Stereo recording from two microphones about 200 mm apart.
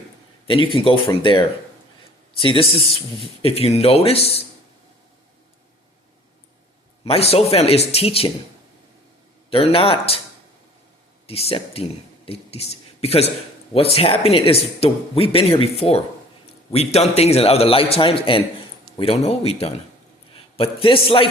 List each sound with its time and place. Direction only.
0.4 s speech: 25° left (ahead or behind)
7.0 s speech: 30° left (ahead or behind)
9.5 s speech: 30° left (ahead or behind)
11.3 s a man's voice: 30° left (ahead or behind)